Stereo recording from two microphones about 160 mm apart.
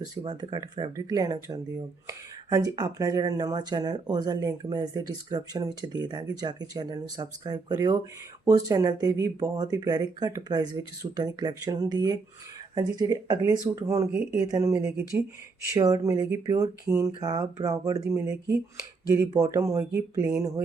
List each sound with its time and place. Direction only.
0.2 s speech: 30° right (ahead or behind)